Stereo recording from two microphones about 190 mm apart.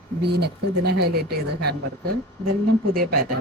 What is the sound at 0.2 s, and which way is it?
Speech, 60° right (ahead or behind).